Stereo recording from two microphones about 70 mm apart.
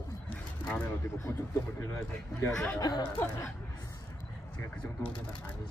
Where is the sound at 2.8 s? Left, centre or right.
Left.